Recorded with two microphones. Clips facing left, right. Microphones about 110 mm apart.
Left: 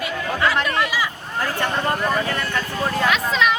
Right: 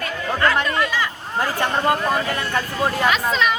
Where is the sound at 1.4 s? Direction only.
15° right (ahead or behind).